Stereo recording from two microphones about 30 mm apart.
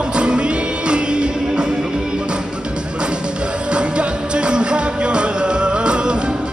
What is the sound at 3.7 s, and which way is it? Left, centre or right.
Music, right.